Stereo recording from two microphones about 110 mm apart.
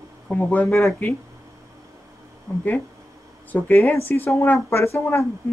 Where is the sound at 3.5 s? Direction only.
20° left (ahead or behind).